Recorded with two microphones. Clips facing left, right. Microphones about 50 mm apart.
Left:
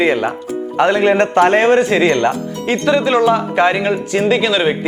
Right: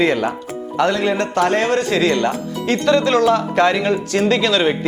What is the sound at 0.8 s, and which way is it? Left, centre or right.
Speech, left.